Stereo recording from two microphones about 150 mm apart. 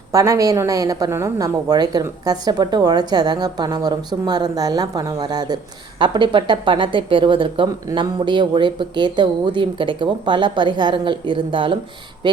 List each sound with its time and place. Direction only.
0.1 s a woman's voice: 25° right (ahead or behind)